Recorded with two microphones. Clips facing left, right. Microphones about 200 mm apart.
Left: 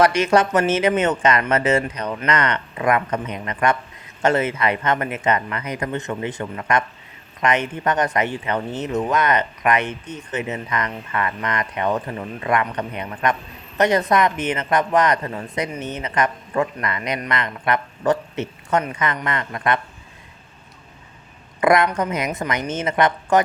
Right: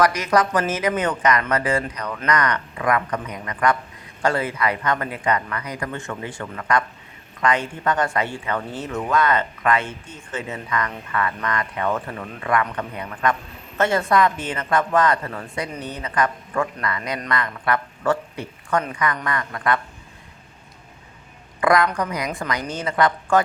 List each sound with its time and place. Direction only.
0.0 s a woman's voice: 25° left (ahead or behind)
21.6 s a woman's voice: 25° left (ahead or behind)